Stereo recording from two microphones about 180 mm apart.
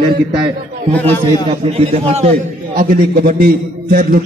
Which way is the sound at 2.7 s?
50° right (ahead or behind).